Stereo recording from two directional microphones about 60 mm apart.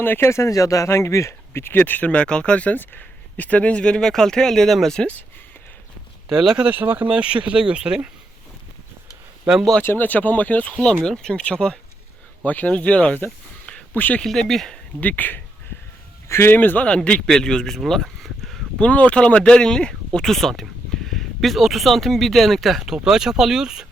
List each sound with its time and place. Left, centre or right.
0.0 s speech: left
0.3 s speech: left
2.0 s speech: centre
6.3 s speech: centre
6.7 s speech: right
7.1 s speech: centre
9.8 s speech: left
11.0 s speech: centre
12.5 s speech: left
14.2 s speech: centre
15.0 s speech: left
16.3 s speech: left
16.6 s speech: left; by 18.6 s centre
18.8 s speech: left; by 23.8 s centre